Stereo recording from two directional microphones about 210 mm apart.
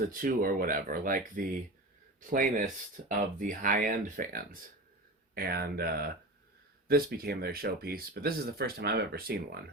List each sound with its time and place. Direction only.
0.1 s speech: 40° right (ahead or behind)